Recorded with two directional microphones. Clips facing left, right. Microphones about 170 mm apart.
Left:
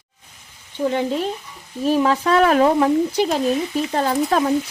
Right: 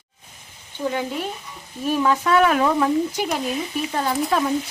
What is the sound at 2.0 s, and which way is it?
Speech, 35° left (ahead or behind).